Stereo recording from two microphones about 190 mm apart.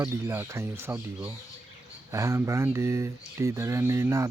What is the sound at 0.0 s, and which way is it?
Speech, 15° right (ahead or behind).